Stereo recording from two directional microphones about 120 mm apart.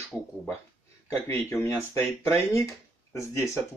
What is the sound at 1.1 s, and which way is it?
Speech, 20° left (ahead or behind).